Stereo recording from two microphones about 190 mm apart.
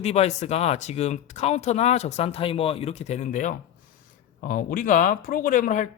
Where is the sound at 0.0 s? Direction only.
35° left (ahead or behind).